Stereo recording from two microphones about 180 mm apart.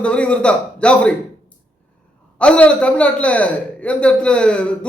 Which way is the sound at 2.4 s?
5° left (ahead or behind).